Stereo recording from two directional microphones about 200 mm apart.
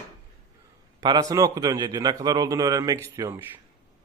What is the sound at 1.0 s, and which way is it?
A man's voice, 20° right (ahead or behind).